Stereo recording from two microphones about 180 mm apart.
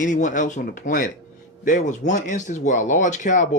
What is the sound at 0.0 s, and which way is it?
Speech, 45° left (ahead or behind).